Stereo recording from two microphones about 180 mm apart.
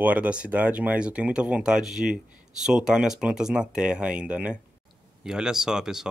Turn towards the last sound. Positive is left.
turn(degrees=-5)  # may be behind; listen again after turning